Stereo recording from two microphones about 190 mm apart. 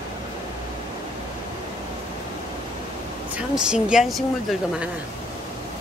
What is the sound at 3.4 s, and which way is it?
Speech, 5° right (ahead or behind).